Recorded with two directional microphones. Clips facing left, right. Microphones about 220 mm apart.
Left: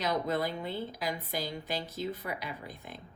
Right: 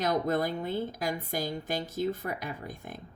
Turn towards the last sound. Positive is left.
turn(degrees=-45)  # may be behind; listen again after turning